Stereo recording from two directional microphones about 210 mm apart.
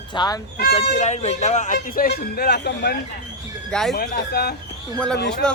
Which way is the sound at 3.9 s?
45° left (ahead or behind).